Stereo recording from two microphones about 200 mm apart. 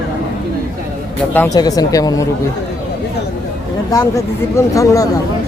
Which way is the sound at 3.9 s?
15° left (ahead or behind).